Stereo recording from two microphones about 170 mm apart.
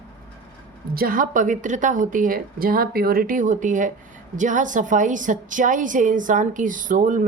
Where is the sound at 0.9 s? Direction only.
55° right (ahead or behind).